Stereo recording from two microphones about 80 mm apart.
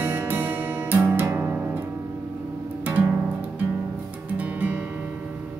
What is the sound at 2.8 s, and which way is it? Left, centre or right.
Music, right.